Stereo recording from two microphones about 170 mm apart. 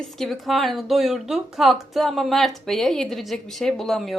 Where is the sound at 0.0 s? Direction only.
Centre (ahead or behind).